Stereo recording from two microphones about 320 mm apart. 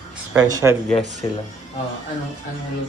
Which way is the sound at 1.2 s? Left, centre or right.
Centre.